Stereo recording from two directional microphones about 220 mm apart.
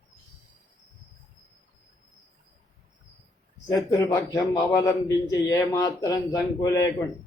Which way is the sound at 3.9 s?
15° left (ahead or behind).